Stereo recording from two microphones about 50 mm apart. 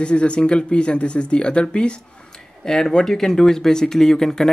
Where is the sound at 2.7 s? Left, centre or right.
Centre.